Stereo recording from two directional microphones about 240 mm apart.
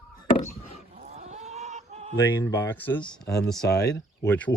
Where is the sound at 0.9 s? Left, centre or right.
Right.